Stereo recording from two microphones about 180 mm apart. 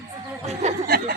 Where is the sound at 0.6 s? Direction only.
40° right (ahead or behind).